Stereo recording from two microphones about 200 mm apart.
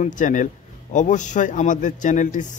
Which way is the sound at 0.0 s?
40° left (ahead or behind).